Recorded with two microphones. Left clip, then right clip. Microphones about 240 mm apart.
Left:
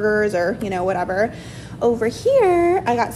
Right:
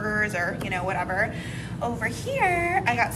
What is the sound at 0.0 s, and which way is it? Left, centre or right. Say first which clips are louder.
Speech: left 8 dB; centre.